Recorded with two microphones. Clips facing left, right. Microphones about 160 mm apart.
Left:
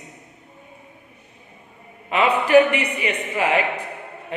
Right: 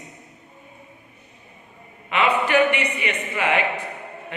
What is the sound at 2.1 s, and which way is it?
A man's voice, 35° left (ahead or behind).